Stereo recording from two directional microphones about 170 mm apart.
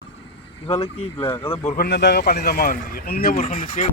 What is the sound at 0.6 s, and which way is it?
Speech, 40° left (ahead or behind).